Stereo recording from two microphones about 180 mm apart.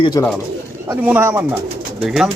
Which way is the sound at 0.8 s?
10° right (ahead or behind).